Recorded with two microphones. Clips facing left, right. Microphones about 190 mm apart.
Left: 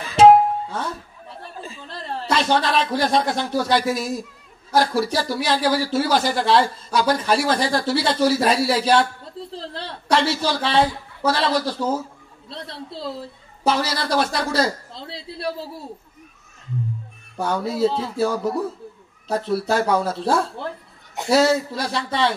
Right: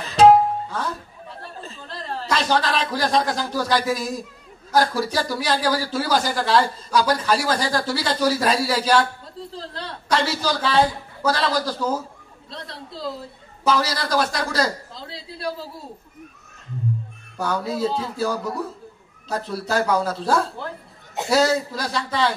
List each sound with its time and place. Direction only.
0.2 s tabla: 25° left (ahead or behind)
2.2 s speech: 25° left (ahead or behind)
17.4 s speech: 25° left (ahead or behind)